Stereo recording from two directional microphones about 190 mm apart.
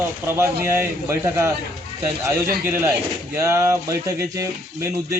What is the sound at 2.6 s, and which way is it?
Speech, 10° right (ahead or behind).